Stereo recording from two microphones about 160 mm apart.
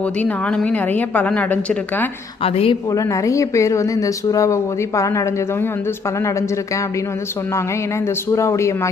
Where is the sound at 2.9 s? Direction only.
20° left (ahead or behind).